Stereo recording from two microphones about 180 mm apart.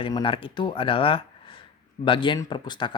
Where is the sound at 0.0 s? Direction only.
25° left (ahead or behind).